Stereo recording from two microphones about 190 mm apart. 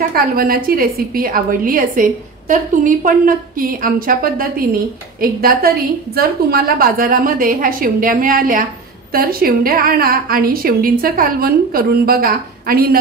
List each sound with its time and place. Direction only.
0.1 s a woman's voice: 50° right (ahead or behind)